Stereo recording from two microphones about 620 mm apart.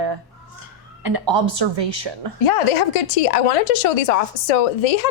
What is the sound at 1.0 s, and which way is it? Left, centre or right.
Speech, right.